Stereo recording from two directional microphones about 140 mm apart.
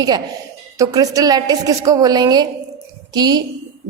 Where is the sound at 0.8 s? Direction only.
25° right (ahead or behind).